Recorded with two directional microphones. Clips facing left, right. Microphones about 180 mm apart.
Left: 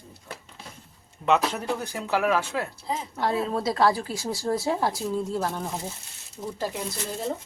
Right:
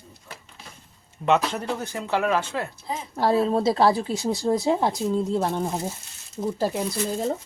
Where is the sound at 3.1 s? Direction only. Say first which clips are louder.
Right 6 dB; 35° right (ahead or behind).